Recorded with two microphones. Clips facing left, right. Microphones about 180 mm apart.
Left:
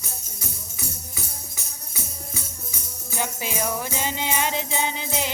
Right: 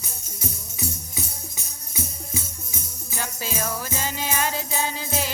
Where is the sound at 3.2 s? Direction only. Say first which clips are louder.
Left 2 dB; 15° left (ahead or behind).